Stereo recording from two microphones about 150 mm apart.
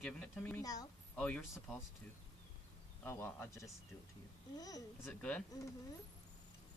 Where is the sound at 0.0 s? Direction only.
10° left (ahead or behind).